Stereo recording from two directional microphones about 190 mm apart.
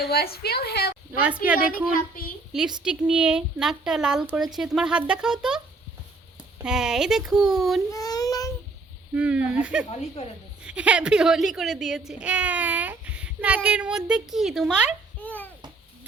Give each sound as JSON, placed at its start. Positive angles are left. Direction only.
{"t": 0.1, "sound": "a woman's voice", "side_deg": 55}
{"t": 1.2, "sound": "a woman's voice", "side_deg": -5}
{"t": 6.6, "sound": "speech", "side_deg": -5}
{"t": 7.9, "sound": "child singing", "side_deg": 20}
{"t": 9.1, "sound": "a woman's voice", "side_deg": -5}
{"t": 15.2, "sound": "babbling", "side_deg": 10}